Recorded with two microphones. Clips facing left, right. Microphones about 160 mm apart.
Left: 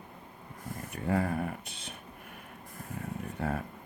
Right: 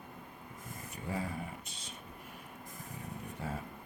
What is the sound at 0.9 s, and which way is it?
Speech, 65° left (ahead or behind).